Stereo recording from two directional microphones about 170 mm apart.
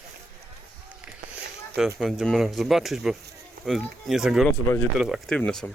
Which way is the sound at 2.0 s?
Centre (ahead or behind).